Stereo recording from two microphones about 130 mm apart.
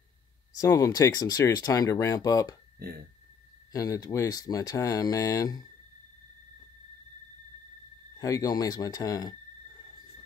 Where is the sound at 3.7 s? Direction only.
25° left (ahead or behind).